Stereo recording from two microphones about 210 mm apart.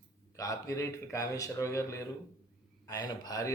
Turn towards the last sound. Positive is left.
turn(degrees=15)  # may be behind; listen again after turning